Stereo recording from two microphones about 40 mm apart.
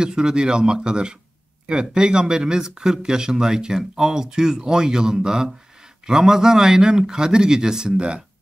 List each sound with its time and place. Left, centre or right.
0.0 s speech: centre